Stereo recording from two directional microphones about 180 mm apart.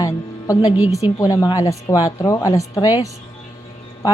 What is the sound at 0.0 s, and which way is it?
Music, 20° left (ahead or behind).